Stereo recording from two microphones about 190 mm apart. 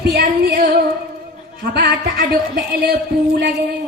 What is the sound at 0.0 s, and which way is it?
Female singing, 50° right (ahead or behind).